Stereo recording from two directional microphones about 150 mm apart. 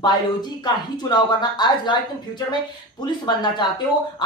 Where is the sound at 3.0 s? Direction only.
30° left (ahead or behind).